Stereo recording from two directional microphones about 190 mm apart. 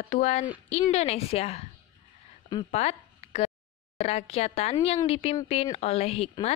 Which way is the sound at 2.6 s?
35° left (ahead or behind).